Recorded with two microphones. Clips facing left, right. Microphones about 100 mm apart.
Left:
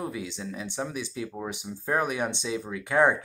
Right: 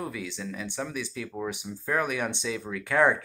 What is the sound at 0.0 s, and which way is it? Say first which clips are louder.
Speech: left 1 dB; 25° left (ahead or behind).